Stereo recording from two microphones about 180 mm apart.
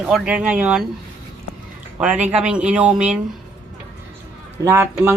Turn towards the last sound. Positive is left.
turn(degrees=-15)  # may be behind; listen again after turning